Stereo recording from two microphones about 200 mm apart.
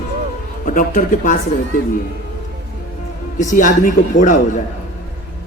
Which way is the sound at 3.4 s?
40° left (ahead or behind).